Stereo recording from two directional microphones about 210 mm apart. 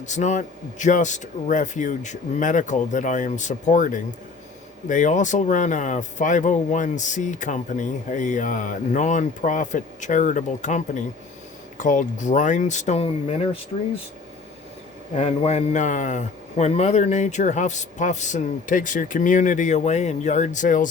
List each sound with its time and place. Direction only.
0.0 s speech: 35° left (ahead or behind)
15.1 s speech: 30° left (ahead or behind)